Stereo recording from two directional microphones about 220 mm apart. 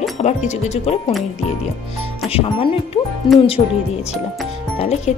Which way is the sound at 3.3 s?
20° left (ahead or behind).